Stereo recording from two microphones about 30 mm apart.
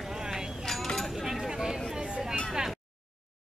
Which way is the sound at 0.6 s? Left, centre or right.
Centre.